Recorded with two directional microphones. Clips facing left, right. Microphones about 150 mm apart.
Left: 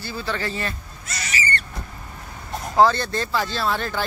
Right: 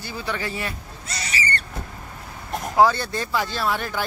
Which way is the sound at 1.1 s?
30° right (ahead or behind).